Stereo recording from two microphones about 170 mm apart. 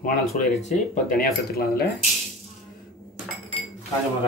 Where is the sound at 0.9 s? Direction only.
55° left (ahead or behind).